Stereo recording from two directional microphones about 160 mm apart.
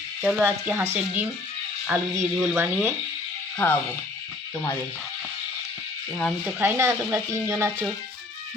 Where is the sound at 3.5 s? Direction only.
10° left (ahead or behind).